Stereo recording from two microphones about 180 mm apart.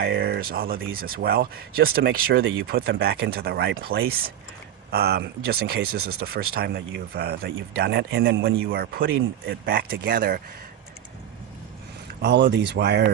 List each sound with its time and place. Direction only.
0.0 s speech: 65° right (ahead or behind)
2.4 s speech: 90° right
2.6 s speech: 60° right (ahead or behind)
12.2 s speech: 65° right (ahead or behind)